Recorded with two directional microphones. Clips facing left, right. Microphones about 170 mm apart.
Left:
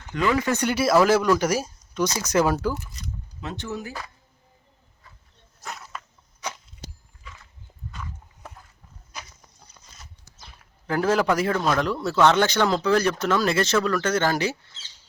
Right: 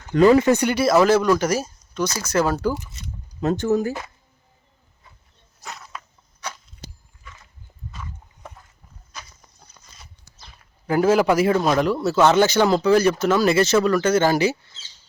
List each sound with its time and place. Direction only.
0.1 s speech: 35° right (ahead or behind)
0.6 s speech: 5° left (ahead or behind)
3.4 s speech: 45° right (ahead or behind)
5.6 s a sound: 5° left (ahead or behind)
10.8 s speech: 10° right (ahead or behind)